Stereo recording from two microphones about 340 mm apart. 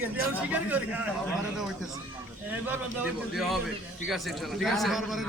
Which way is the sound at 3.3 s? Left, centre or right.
Centre.